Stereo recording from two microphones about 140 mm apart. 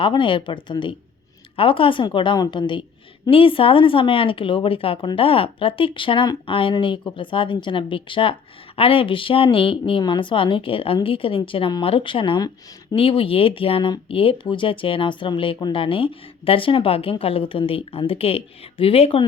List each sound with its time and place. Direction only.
0.0 s speech: 35° left (ahead or behind)